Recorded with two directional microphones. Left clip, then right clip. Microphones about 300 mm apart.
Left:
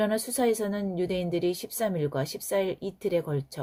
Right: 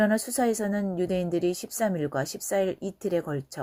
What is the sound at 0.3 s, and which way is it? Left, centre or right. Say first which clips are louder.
Speech: even; centre.